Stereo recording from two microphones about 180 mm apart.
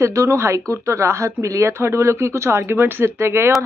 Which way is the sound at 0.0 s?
15° right (ahead or behind).